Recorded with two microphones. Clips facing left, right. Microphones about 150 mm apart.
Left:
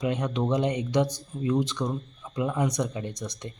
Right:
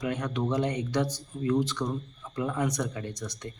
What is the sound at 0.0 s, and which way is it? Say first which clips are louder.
Speech: left 3 dB; 20° left (ahead or behind).